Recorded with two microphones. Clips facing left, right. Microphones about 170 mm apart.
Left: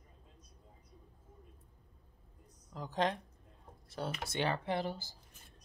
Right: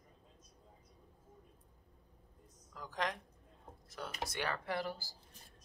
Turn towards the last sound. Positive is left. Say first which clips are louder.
# left 3 dB
turn(degrees=20)  # may be behind; listen again after turning